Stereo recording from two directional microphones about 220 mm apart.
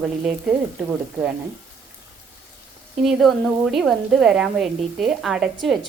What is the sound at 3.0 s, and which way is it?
A woman's voice, centre (ahead or behind).